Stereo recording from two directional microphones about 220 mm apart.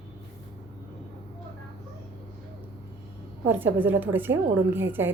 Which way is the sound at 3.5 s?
10° right (ahead or behind).